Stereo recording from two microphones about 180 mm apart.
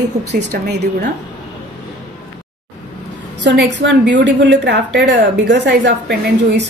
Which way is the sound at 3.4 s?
75° right (ahead or behind).